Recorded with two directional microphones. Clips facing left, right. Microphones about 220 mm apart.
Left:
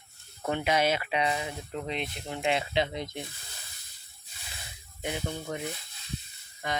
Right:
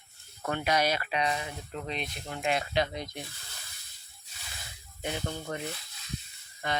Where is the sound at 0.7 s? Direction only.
25° left (ahead or behind).